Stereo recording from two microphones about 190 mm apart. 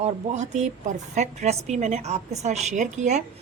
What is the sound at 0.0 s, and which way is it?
Speech, 40° right (ahead or behind).